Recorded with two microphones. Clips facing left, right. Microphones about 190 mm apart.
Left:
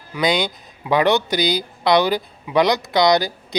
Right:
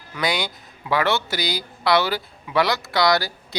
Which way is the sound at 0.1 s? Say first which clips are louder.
Left 5 dB; 20° left (ahead or behind).